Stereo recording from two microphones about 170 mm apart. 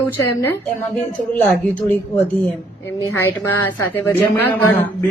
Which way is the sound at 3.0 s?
15° left (ahead or behind).